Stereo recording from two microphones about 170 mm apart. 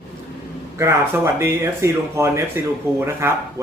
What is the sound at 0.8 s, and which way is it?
Speech, 15° right (ahead or behind).